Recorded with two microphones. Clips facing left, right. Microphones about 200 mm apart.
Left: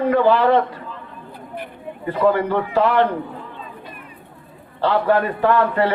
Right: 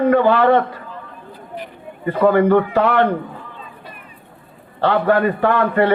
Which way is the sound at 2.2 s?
55° right (ahead or behind).